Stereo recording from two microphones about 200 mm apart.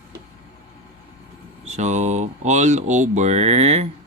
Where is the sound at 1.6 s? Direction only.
35° right (ahead or behind).